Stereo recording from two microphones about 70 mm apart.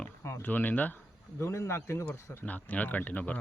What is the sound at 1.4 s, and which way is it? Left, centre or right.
Speech, left.